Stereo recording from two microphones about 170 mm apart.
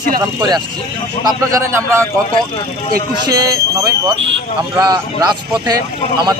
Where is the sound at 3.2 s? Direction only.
20° right (ahead or behind).